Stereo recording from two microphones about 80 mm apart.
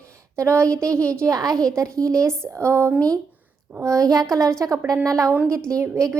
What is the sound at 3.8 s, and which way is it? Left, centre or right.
A woman's voice, right.